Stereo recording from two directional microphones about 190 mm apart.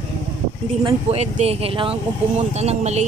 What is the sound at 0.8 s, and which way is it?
Speech, 35° right (ahead or behind).